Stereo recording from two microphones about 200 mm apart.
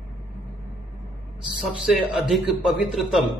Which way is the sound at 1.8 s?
Centre (ahead or behind).